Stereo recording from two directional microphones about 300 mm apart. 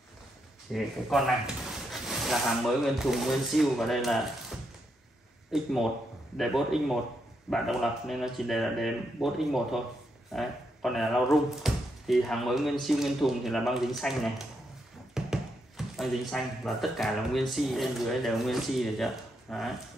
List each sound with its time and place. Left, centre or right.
0.7 s speech: centre
5.5 s speech: centre
15.1 s a sound: centre
16.0 s speech: centre